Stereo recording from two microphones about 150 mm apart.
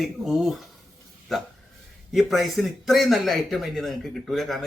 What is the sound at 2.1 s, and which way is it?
Speech, centre (ahead or behind).